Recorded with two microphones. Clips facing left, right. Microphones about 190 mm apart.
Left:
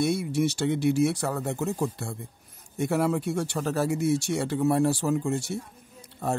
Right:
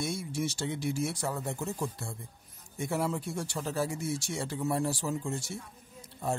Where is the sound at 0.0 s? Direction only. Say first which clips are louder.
Left 9 dB; 65° left (ahead or behind).